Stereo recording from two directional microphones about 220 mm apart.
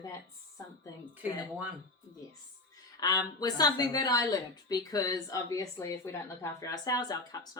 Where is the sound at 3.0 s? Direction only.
15° left (ahead or behind).